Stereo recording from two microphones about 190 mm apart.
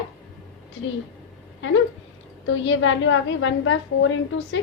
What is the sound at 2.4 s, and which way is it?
A woman's voice, 85° left.